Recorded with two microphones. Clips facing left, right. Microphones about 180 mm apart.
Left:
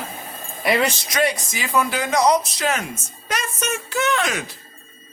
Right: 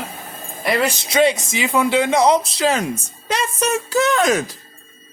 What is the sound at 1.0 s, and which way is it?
Speech, 25° right (ahead or behind).